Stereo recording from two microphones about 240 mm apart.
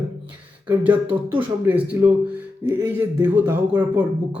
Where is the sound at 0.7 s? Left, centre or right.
Centre.